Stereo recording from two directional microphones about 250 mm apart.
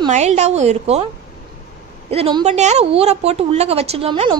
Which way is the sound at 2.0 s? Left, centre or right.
Right.